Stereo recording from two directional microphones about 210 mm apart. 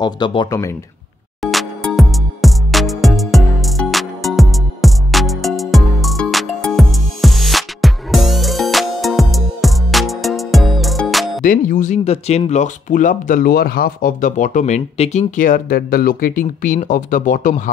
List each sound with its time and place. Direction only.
0.0 s speech: 20° left (ahead or behind)
1.4 s music: centre (ahead or behind)
11.4 s speech: 40° left (ahead or behind)